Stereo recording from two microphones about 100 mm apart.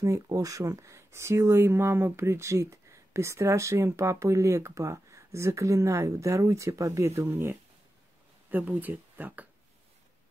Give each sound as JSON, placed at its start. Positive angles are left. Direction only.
{"t": 0.0, "sound": "speech", "side_deg": -35}